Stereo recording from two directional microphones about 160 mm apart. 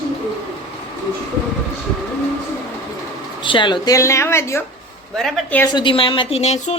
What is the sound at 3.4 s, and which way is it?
A woman's voice, 30° left (ahead or behind).